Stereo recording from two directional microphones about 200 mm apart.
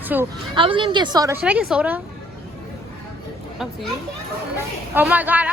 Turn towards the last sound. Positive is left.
turn(degrees=-10)  # may be behind; listen again after turning